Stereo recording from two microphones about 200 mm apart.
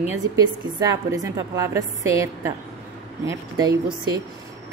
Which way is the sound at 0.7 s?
15° right (ahead or behind).